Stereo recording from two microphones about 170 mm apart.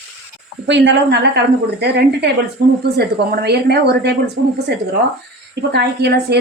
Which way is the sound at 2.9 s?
65° right (ahead or behind).